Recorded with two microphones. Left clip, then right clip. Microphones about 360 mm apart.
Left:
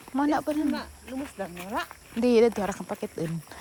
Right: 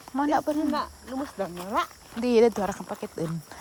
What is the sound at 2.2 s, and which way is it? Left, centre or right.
Speech, centre.